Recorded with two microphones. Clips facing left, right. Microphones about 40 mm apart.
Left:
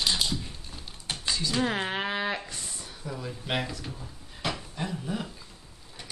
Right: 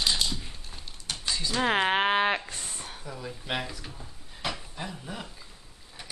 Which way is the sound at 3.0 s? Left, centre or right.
Centre.